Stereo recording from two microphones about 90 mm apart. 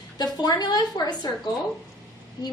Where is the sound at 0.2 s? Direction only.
50° left (ahead or behind).